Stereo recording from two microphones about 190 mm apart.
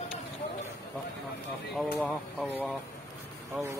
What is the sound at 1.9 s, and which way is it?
Speech, 5° left (ahead or behind).